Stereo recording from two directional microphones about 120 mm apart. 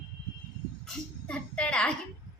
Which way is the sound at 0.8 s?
10° left (ahead or behind).